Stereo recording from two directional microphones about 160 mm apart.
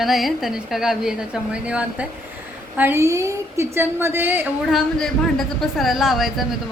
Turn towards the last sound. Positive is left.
turn(degrees=0)  # may be behind; listen again after turning